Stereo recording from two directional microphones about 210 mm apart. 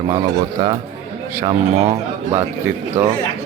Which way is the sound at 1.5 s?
20° right (ahead or behind).